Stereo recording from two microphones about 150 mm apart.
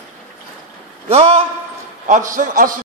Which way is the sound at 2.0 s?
60° right (ahead or behind).